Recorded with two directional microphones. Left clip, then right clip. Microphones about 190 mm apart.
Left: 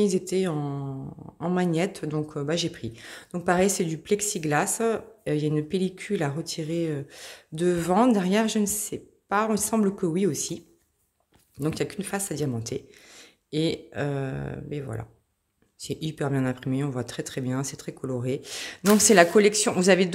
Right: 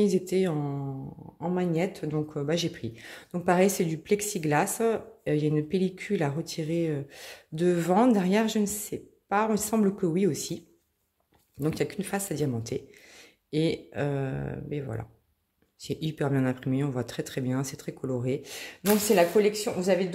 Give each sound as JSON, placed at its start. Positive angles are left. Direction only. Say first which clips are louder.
{"t": 0.0, "sound": "speech", "louder": "left 1 dB", "side_deg": 0}
{"t": 1.4, "sound": "speech", "louder": "left 2 dB", "side_deg": 15}
{"t": 11.6, "sound": "speech", "louder": "left 1 dB", "side_deg": 0}
{"t": 19.0, "sound": "a woman's voice", "louder": "left 5 dB", "side_deg": 35}